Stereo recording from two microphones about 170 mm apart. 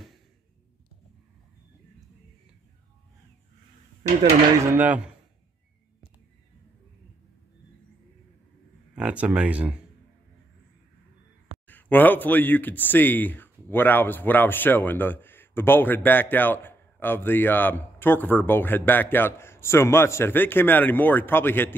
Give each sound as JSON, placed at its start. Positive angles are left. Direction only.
{"t": 4.7, "sound": "speech", "side_deg": -10}
{"t": 8.9, "sound": "speech", "side_deg": -5}
{"t": 11.6, "sound": "speech", "side_deg": 10}